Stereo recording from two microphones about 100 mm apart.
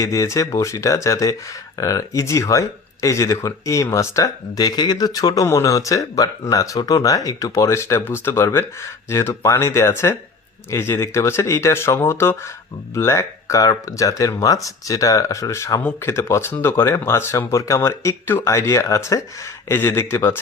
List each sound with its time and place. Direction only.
0.0 s speech: 35° left (ahead or behind)
15.8 s speech: 20° left (ahead or behind)
19.6 s speech: 20° left (ahead or behind)